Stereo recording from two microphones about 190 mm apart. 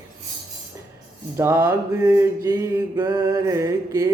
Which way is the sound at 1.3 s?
15° right (ahead or behind).